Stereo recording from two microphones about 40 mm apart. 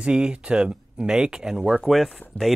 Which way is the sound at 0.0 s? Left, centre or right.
Right.